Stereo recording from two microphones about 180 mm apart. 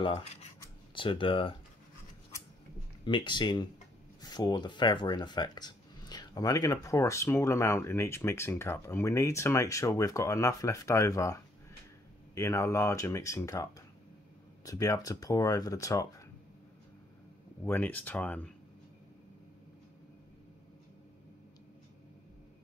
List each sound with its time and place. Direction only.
0.0 s speech: 35° left (ahead or behind)
3.1 s speech: 25° left (ahead or behind)
12.4 s speech: 15° left (ahead or behind)
17.6 s speech: 10° left (ahead or behind)